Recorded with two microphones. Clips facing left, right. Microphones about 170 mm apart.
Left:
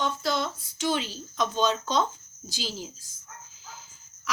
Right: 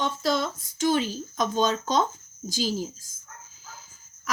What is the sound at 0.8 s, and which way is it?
Speech, 45° right (ahead or behind).